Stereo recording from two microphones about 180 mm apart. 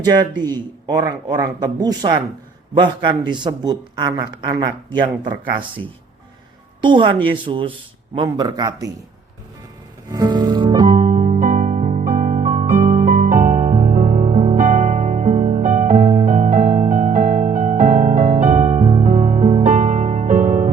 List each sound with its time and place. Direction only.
0.0 s a man's voice: 20° right (ahead or behind)
10.1 s music: 20° right (ahead or behind)
11.0 s music: 45° right (ahead or behind)